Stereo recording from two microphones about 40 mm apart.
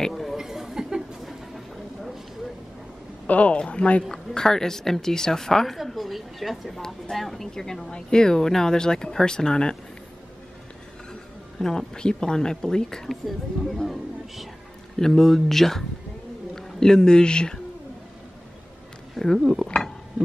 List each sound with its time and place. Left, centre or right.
0.1 s chatter: centre
0.4 s a sound: centre
3.3 s speech: left
4.1 s speech: centre
11.5 s speech: centre
13.1 s speech: centre
15.0 s speech: centre
19.1 s speech: centre